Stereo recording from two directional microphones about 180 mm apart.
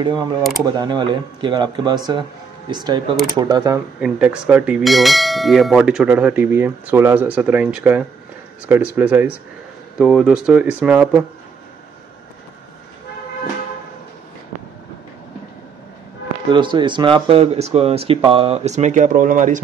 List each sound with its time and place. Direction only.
0.0 s a man's voice: 25° right (ahead or behind)
4.0 s bell: 5° right (ahead or behind)
9.9 s speech: 5° right (ahead or behind)
16.5 s speech: 25° right (ahead or behind); by 19.6 s 45° right (ahead or behind)